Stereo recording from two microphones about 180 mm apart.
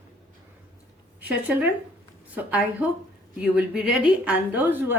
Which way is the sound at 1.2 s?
10° right (ahead or behind).